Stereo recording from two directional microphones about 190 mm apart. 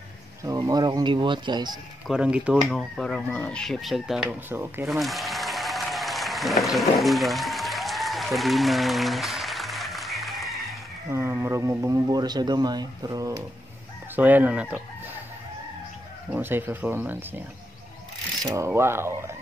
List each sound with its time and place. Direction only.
0.4 s speech: 15° right (ahead or behind)
2.0 s speech: 5° right (ahead or behind)
4.8 s applause: centre (ahead or behind)
11.1 s speech: 15° right (ahead or behind)
14.1 s speech: 10° right (ahead or behind)
16.3 s speech: 10° right (ahead or behind)
18.4 s speech: 20° right (ahead or behind)